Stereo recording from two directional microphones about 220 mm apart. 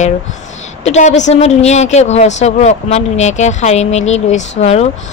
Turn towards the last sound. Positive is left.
turn(degrees=30)  # may be behind; listen again after turning